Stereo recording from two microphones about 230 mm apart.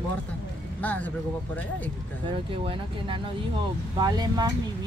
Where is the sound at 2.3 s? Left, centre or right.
Right.